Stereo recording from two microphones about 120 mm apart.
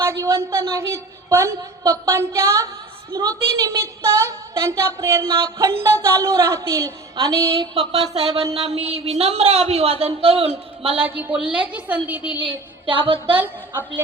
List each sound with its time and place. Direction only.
0.0 s a woman's voice: 20° right (ahead or behind)
8.1 s speech: 60° right (ahead or behind)
11.0 s a woman's voice: 15° right (ahead or behind)
12.9 s a woman's voice: 45° right (ahead or behind)
13.3 s a woman's voice: 15° right (ahead or behind)